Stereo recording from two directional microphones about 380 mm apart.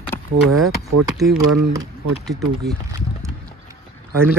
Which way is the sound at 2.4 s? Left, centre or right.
Right.